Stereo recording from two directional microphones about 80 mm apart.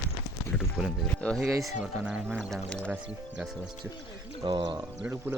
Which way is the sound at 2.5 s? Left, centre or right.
Centre.